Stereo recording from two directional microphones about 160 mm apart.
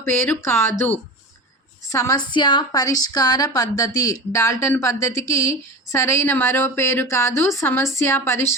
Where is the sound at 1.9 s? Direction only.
20° left (ahead or behind).